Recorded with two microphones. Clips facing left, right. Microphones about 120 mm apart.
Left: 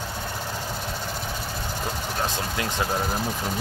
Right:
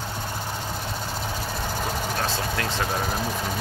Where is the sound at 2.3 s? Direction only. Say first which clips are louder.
Right 1 dB; 15° left (ahead or behind).